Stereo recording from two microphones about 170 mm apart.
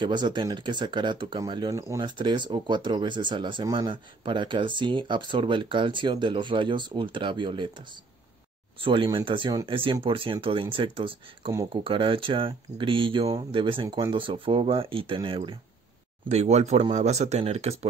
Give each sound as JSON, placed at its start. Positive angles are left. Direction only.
{"t": 0.0, "sound": "speech", "side_deg": -25}
{"t": 16.3, "sound": "speech", "side_deg": -40}